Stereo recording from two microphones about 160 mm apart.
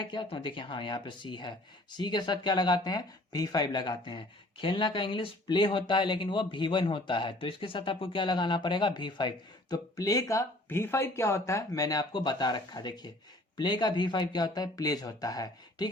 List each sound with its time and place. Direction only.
0.0 s speech: 30° left (ahead or behind)